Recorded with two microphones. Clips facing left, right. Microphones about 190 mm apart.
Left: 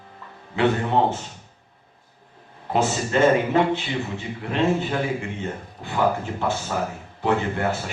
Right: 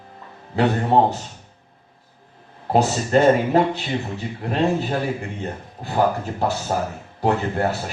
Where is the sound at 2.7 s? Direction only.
40° right (ahead or behind).